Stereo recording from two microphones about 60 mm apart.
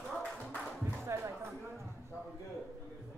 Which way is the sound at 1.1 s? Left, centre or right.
Right.